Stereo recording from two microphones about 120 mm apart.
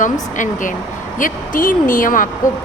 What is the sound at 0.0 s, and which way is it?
Speech, 90° left.